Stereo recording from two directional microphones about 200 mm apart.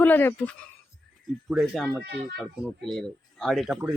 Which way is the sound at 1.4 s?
5° right (ahead or behind).